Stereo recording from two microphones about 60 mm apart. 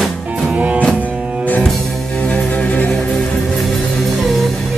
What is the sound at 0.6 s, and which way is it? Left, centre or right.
Music, right.